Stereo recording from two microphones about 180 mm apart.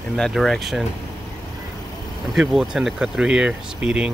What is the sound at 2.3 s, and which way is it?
Speech, centre (ahead or behind).